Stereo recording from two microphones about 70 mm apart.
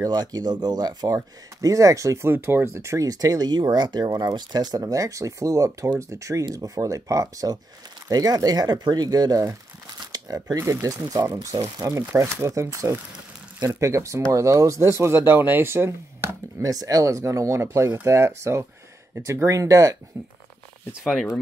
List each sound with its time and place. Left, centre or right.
0.1 s speech: right
1.0 s speech: right
2.2 s speech: right
4.9 s speech: right
10.6 s speech: right
10.9 s speech: right
16.6 s speech: right